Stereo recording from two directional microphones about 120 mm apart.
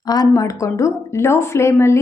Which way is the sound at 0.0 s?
30° left (ahead or behind).